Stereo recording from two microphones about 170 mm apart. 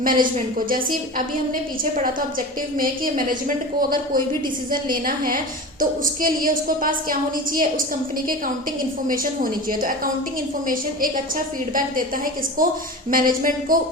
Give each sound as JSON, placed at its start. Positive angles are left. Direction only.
{"t": 0.0, "sound": "a woman's voice", "side_deg": -55}
{"t": 9.0, "sound": "a woman's voice", "side_deg": -55}
{"t": 11.7, "sound": "a woman's voice", "side_deg": -55}